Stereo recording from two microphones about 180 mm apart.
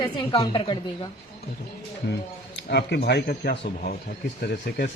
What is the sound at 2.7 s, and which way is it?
Speech, 65° left (ahead or behind).